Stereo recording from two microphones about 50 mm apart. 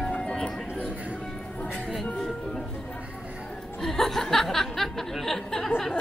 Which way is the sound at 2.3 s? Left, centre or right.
Centre.